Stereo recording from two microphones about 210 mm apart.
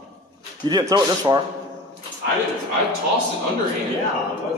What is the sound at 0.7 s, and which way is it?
Speech, 20° right (ahead or behind).